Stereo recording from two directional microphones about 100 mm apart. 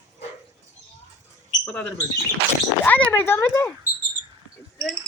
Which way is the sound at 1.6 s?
10° left (ahead or behind).